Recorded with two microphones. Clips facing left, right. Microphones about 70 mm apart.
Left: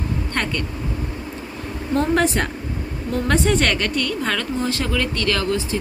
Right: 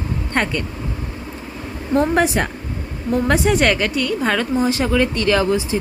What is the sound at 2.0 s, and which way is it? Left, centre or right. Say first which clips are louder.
A woman's voice: right 2 dB; centre.